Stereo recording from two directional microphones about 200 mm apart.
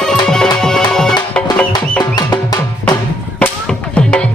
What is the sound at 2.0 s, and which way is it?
Drum, 20° left (ahead or behind).